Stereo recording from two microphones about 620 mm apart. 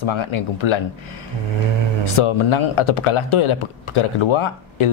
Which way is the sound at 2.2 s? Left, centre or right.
Left.